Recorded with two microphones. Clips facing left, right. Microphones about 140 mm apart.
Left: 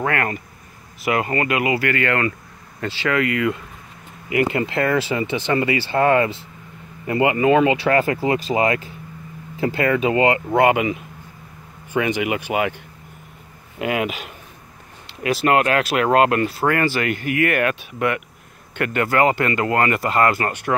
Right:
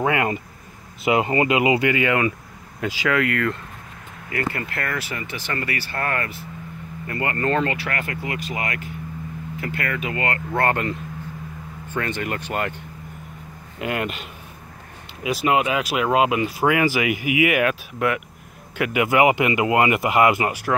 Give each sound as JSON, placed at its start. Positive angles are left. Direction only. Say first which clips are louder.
{"t": 0.0, "sound": "speech", "louder": "right 1 dB", "side_deg": -15}
{"t": 4.3, "sound": "speech", "louder": "left 7 dB", "side_deg": 15}
{"t": 7.7, "sound": "speech", "louder": "left 10 dB", "side_deg": 25}